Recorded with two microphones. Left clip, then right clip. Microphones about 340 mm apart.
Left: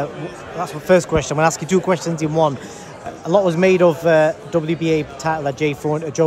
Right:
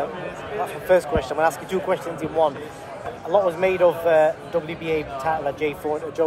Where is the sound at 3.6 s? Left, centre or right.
Left.